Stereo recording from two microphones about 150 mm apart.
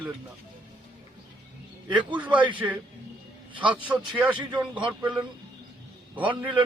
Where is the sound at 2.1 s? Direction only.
10° right (ahead or behind).